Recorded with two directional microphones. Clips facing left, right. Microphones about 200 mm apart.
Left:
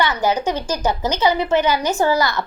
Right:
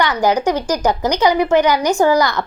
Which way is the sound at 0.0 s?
15° right (ahead or behind).